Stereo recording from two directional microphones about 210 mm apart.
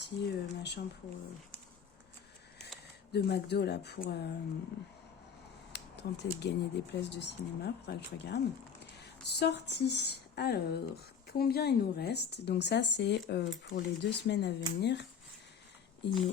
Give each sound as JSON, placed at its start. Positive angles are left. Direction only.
{"t": 0.0, "sound": "speech", "side_deg": 55}
{"t": 3.1, "sound": "speech", "side_deg": 50}
{"t": 5.7, "sound": "speech", "side_deg": 55}